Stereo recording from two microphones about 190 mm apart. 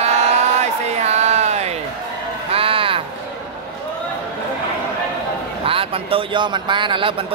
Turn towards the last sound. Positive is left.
turn(degrees=-25)  # may be behind; listen again after turning